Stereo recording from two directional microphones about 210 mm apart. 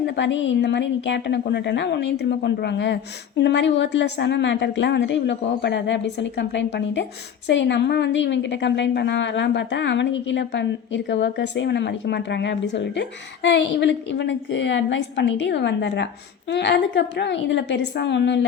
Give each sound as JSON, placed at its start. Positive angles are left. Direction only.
{"t": 0.0, "sound": "a woman's voice", "side_deg": 60}